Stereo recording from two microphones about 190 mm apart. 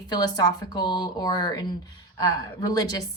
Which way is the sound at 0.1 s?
20° left (ahead or behind).